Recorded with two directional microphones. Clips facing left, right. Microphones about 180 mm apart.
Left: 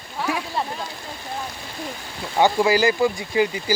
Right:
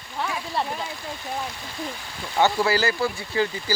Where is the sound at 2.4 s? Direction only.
15° left (ahead or behind).